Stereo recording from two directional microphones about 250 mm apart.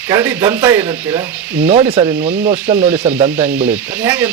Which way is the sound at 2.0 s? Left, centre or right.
Centre.